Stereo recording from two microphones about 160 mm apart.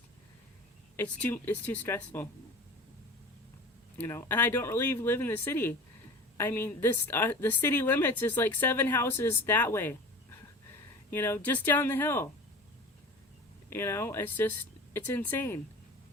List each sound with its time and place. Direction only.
0.9 s a woman's voice: 10° left (ahead or behind)
3.9 s a woman's voice: 15° left (ahead or behind)
11.1 s a woman's voice: 15° left (ahead or behind)
13.7 s a woman's voice: 15° left (ahead or behind)